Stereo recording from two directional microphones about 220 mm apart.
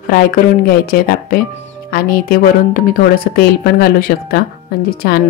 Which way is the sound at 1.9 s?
40° left (ahead or behind).